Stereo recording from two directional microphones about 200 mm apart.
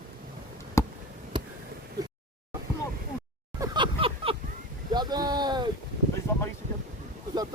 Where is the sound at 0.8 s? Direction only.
15° left (ahead or behind).